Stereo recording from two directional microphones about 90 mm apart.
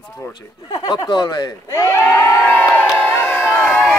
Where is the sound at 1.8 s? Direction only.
30° left (ahead or behind).